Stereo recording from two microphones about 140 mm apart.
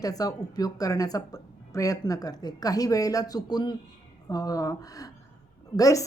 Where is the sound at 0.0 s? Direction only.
25° left (ahead or behind).